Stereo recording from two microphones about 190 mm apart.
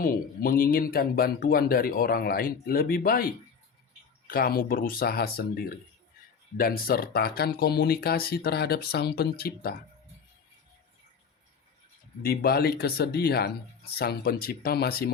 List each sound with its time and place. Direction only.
0.0 s speech: 50° left (ahead or behind)
4.3 s speech: 50° left (ahead or behind)
12.2 s speech: 55° left (ahead or behind)